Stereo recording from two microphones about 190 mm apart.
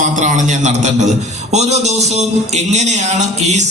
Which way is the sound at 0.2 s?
40° right (ahead or behind).